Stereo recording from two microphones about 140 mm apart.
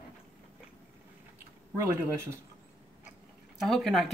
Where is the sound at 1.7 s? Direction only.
20° right (ahead or behind).